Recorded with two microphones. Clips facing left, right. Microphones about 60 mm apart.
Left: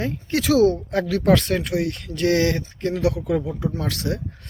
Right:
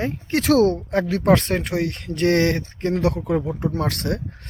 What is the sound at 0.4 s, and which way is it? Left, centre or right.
Speech, right.